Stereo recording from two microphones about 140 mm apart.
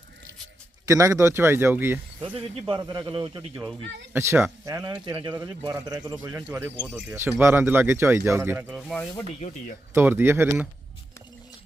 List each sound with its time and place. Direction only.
0.9 s speech: 25° right (ahead or behind)
2.2 s speech: 40° right (ahead or behind)
4.1 s a man's voice: 20° right (ahead or behind)
7.1 s speech: 10° right (ahead or behind)
8.7 s speech: 5° left (ahead or behind)
9.4 s speech: 45° left (ahead or behind)
9.9 s speech: 15° right (ahead or behind)